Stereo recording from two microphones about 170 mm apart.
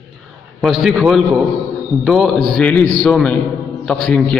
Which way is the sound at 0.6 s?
Centre (ahead or behind).